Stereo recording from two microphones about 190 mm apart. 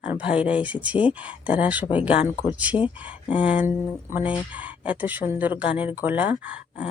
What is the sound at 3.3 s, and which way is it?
Speech, 5° right (ahead or behind).